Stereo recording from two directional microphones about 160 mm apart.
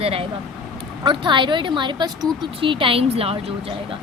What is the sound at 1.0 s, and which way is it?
A woman's voice, 30° right (ahead or behind).